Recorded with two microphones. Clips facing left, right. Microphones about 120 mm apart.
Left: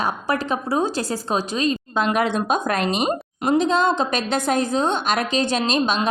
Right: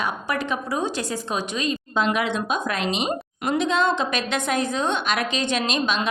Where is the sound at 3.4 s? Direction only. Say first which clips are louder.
Left 3 dB; 35° left (ahead or behind).